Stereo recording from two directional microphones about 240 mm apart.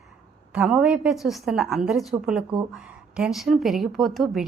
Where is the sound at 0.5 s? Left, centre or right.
Centre.